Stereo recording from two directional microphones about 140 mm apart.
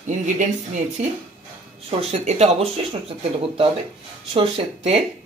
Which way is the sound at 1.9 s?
50° right (ahead or behind).